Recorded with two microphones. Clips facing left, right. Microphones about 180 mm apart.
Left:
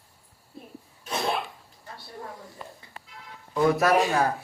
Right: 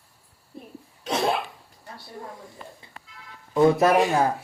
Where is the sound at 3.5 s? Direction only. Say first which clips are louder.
Right 3 dB; 25° right (ahead or behind).